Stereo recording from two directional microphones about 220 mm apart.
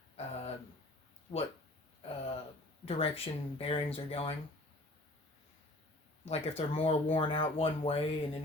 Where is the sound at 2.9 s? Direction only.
25° left (ahead or behind).